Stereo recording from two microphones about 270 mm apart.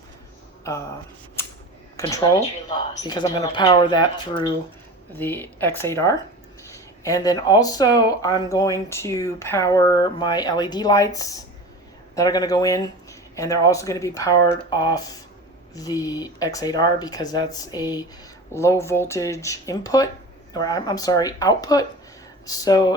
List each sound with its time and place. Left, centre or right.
0.7 s speech: centre
2.0 s speech: centre